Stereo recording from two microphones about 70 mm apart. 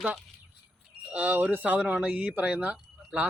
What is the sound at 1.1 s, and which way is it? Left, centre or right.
Speech, right.